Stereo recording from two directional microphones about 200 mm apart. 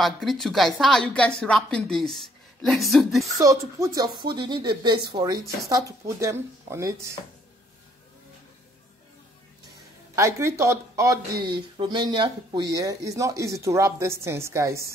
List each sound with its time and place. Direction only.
0.0 s a woman's voice: centre (ahead or behind)
3.3 s speech: 15° right (ahead or behind)
10.1 s speech: 15° right (ahead or behind)